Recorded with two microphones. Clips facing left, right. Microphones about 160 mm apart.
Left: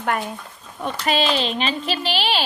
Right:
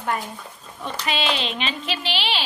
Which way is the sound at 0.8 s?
45° left (ahead or behind).